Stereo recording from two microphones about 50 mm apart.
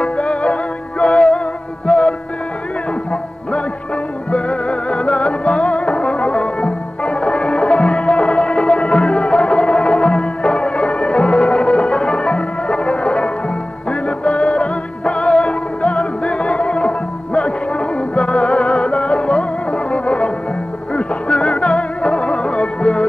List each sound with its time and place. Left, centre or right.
0.0 s music: left
4.3 s music: left